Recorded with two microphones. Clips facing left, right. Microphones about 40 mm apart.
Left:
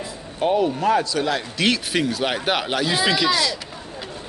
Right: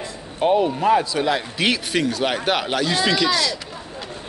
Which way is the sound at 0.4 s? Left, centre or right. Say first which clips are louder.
Right 2 dB; centre.